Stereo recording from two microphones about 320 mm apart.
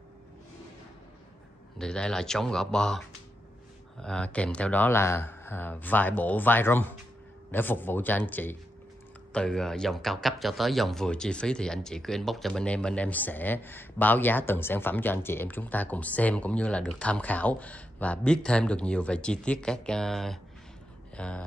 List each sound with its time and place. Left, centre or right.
1.8 s speech: centre
4.0 s speech: centre